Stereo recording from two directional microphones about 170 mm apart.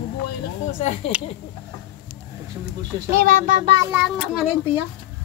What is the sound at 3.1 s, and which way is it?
Speech, 55° right (ahead or behind).